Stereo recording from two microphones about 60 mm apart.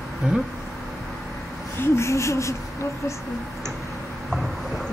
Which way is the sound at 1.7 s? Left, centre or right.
Left.